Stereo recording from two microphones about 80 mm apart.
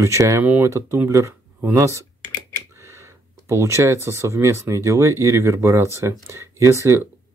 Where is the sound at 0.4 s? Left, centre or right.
Right.